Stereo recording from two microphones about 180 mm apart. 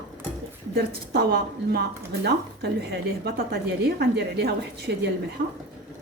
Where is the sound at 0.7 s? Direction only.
60° right (ahead or behind).